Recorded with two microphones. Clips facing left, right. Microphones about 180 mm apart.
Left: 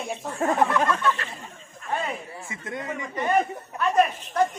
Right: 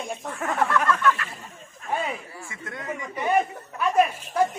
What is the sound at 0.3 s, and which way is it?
Speech, 25° left (ahead or behind).